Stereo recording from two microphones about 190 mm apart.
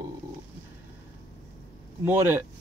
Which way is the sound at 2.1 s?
10° right (ahead or behind).